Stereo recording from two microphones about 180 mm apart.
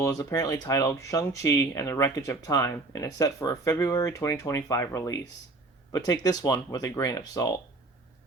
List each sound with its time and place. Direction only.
0.0 s speech: 20° left (ahead or behind)